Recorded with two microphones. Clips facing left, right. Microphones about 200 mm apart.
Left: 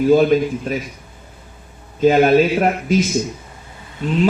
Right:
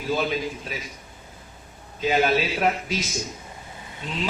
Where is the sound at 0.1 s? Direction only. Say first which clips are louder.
Left 10 dB; 50° left (ahead or behind).